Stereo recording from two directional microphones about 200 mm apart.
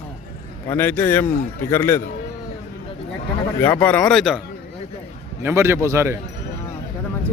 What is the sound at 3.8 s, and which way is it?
Speech, 10° left (ahead or behind).